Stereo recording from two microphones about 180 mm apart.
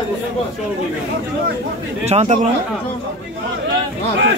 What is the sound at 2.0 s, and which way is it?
Speech, 40° right (ahead or behind).